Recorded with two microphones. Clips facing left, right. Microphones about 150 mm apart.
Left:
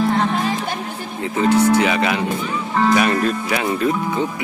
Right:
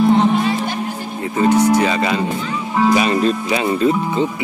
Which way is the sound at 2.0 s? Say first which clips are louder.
Right 1 dB; 5° left (ahead or behind).